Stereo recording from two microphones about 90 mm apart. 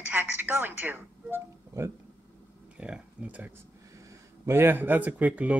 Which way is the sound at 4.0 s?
30° right (ahead or behind).